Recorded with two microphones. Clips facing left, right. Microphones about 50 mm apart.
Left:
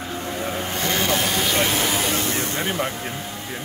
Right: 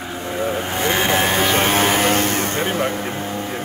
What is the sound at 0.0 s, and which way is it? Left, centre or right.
Vehicle, right.